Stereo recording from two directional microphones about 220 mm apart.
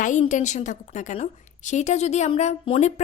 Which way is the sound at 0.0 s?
35° left (ahead or behind).